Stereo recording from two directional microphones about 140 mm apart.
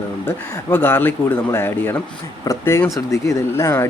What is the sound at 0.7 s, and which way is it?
Speech, 15° left (ahead or behind).